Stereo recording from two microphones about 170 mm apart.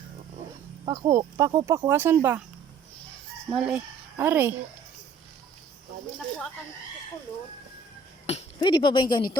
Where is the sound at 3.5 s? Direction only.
5° right (ahead or behind).